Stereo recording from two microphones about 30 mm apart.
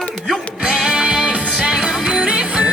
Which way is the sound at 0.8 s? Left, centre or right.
Right.